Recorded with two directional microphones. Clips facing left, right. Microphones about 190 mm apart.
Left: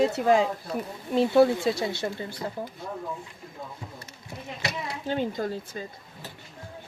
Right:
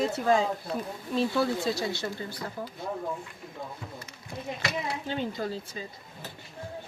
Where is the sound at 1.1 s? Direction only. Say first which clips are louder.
Left 7 dB; 25° left (ahead or behind).